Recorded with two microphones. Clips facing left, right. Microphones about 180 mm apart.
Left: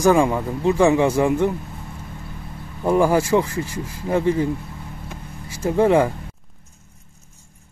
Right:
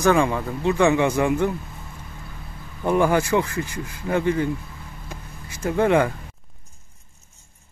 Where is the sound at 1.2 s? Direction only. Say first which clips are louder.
Left 2 dB; centre (ahead or behind).